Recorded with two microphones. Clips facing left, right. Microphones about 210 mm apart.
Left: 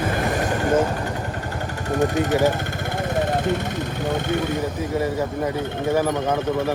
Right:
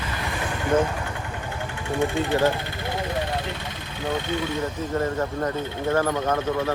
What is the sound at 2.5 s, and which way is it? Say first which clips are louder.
Vehicle: left 2 dB; 50° left (ahead or behind).